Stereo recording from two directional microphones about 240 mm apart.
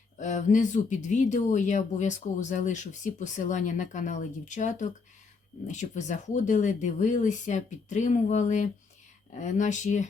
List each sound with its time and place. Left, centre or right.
0.2 s speech: left